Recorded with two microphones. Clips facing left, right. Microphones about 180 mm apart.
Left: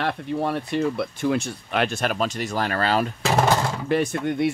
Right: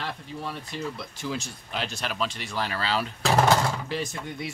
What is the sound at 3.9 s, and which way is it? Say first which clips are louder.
Speech: left 10 dB; 60° left (ahead or behind).